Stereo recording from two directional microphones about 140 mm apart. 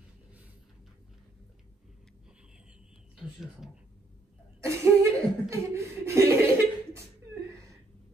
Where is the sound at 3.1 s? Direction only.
Centre (ahead or behind).